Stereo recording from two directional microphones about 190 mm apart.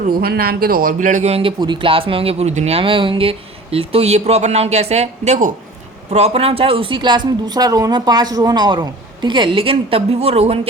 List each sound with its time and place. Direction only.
0.0 s a man's voice: 55° right (ahead or behind); by 10.7 s 30° right (ahead or behind)